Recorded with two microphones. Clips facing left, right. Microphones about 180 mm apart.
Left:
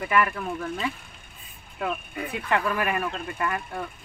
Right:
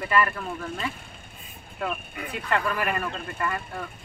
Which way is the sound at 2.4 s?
10° left (ahead or behind).